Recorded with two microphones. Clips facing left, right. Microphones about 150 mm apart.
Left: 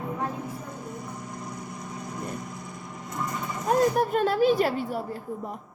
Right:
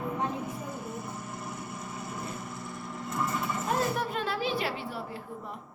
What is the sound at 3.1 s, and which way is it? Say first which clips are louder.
Horse: right 1 dB; 15° left (ahead or behind).